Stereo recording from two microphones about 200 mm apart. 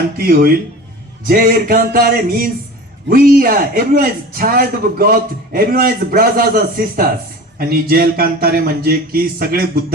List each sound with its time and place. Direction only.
0.2 s a man's voice: 45° right (ahead or behind)